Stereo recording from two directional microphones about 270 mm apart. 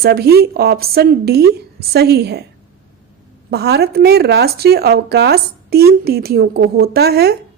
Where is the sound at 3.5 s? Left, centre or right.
Right.